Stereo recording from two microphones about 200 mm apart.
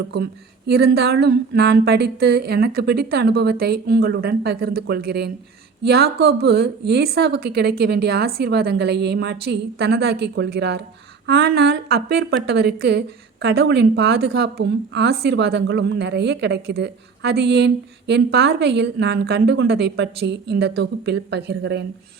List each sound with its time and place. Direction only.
0.7 s a woman's voice: 50° right (ahead or behind)